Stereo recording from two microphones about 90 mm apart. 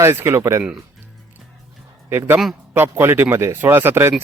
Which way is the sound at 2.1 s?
25° right (ahead or behind).